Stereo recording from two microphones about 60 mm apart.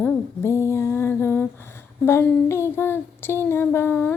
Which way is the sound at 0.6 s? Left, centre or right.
Left.